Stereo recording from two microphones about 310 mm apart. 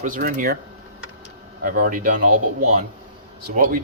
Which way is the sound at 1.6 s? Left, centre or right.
Right.